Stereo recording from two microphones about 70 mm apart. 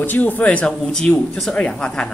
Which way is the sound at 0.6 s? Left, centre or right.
Centre.